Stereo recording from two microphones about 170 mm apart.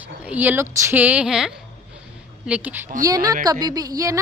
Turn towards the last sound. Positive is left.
turn(degrees=-20)  # may be behind; listen again after turning